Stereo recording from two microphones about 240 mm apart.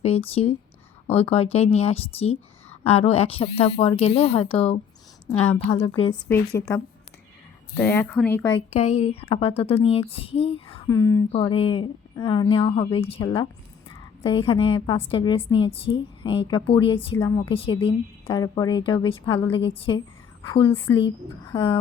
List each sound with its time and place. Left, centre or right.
0.0 s speech: left
6.2 s speech: centre
8.5 s speech: left